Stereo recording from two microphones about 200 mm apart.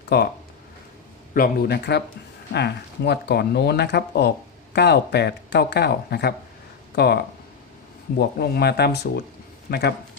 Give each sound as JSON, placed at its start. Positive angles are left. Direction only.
{"t": 0.1, "sound": "speech", "side_deg": 55}
{"t": 1.3, "sound": "speech", "side_deg": 50}